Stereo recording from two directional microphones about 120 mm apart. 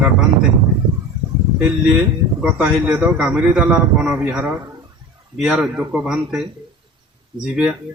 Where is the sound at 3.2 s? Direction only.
5° right (ahead or behind).